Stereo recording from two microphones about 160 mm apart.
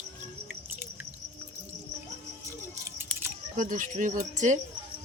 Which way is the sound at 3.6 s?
55° right (ahead or behind).